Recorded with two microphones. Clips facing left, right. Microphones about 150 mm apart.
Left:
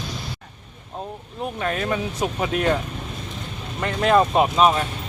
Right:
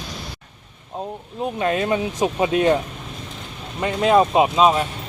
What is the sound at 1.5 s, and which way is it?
Speech, 20° right (ahead or behind).